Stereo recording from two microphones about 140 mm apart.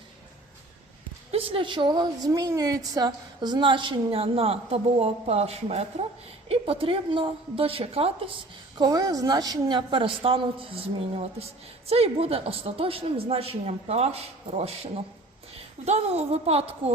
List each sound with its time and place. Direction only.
1.3 s a woman's voice: 40° right (ahead or behind)
8.8 s a woman's voice: 25° right (ahead or behind); by 16.9 s 45° right (ahead or behind)